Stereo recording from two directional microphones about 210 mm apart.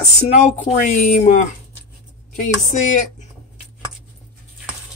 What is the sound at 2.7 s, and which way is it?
Speech, 35° left (ahead or behind).